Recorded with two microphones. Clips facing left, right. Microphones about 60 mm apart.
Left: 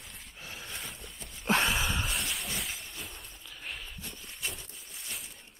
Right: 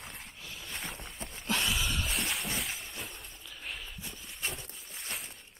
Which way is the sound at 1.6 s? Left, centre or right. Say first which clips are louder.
Left 2 dB; centre.